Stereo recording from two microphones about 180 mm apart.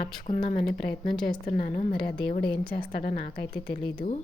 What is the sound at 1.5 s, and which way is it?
Speech, 45° left (ahead or behind).